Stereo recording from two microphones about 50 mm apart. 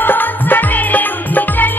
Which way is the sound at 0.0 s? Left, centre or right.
Left.